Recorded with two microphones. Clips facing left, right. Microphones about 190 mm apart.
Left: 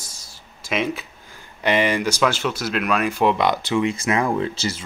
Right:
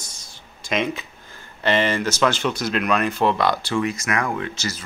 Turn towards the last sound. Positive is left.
turn(degrees=30)  # may be behind; listen again after turning